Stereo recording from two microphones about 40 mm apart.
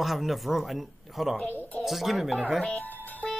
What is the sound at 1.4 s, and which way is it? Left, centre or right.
Speech, left.